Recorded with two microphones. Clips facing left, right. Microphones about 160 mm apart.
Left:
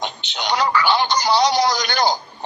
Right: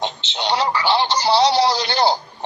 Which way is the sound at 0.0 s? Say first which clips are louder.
Right 2 dB; 30° right (ahead or behind).